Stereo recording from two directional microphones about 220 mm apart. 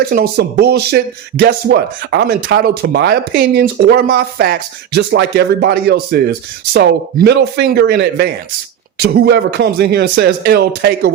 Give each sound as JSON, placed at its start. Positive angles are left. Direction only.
{"t": 0.1, "sound": "speech", "side_deg": -45}